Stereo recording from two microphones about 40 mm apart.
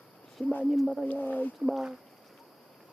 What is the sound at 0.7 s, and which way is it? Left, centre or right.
Speech, centre.